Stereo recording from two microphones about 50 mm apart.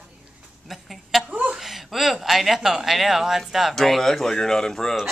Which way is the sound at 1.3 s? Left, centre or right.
Right.